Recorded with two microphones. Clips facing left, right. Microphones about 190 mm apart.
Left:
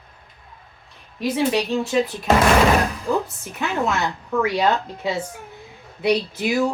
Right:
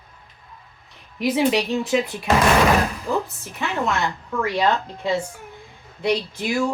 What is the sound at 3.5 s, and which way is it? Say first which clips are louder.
Speech: left 1 dB; 5° left (ahead or behind).